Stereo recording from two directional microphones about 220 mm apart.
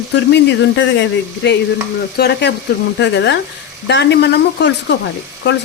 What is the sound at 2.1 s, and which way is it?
Speech, 50° left (ahead or behind).